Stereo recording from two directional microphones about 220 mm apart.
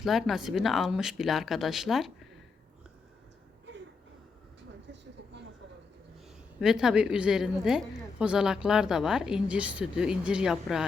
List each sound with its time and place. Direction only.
0.0 s a woman's voice: centre (ahead or behind)
4.9 s a sound: 55° right (ahead or behind)
6.6 s a woman's voice: centre (ahead or behind)